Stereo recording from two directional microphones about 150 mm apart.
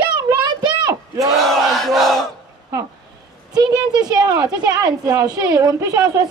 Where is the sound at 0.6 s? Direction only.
25° right (ahead or behind).